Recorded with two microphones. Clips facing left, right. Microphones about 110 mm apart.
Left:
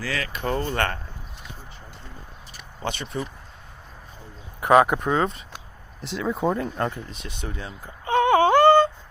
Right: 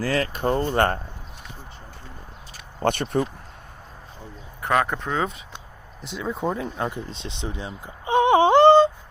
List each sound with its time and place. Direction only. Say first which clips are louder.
0.0 s speech: right 5 dB; 40° right (ahead or behind)
2.8 s speech: right 7 dB; 55° right (ahead or behind)
4.6 s speech: left 6 dB; 15° left (ahead or behind)
5.1 s speech: left 2 dB; centre (ahead or behind)
6.9 s a sound: right 3 dB; 25° right (ahead or behind)